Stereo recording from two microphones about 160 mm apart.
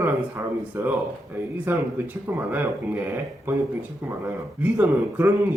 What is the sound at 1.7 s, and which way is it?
A man's voice, 15° right (ahead or behind).